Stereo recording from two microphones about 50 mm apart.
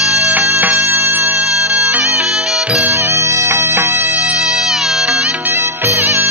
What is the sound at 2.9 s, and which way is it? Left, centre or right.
Music, right.